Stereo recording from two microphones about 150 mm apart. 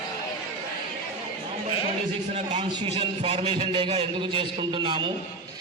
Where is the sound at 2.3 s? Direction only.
45° right (ahead or behind).